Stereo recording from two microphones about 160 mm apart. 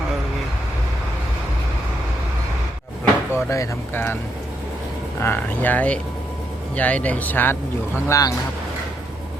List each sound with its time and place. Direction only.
3.0 s speech: 15° left (ahead or behind)
5.2 s speech: 10° left (ahead or behind)